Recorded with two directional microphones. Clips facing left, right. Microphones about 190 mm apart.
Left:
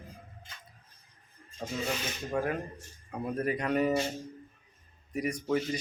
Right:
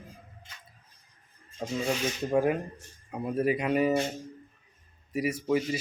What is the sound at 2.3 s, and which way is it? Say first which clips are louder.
Speech: right 6 dB; 20° right (ahead or behind).